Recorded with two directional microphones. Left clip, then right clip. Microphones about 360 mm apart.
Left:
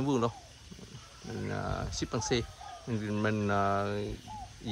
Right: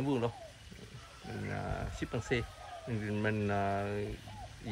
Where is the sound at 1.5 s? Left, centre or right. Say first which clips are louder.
Left 4 dB; centre.